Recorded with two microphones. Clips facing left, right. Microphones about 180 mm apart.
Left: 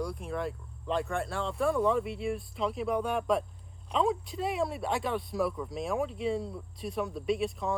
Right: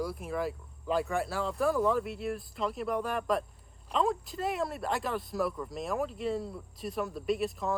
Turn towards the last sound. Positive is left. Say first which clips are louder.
# even
turn(degrees=0)  # may be behind; listen again after turning